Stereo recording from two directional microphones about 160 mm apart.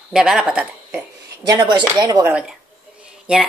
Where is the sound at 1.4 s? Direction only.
25° right (ahead or behind).